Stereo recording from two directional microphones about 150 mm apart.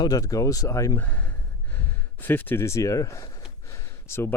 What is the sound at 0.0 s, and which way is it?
Speech, 25° left (ahead or behind).